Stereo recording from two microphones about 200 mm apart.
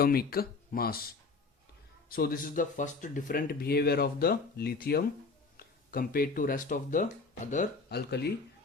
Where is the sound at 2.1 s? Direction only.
45° left (ahead or behind).